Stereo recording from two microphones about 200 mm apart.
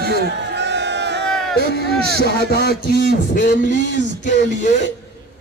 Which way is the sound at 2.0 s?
50° right (ahead or behind).